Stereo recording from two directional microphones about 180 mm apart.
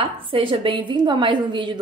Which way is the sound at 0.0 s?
30° right (ahead or behind).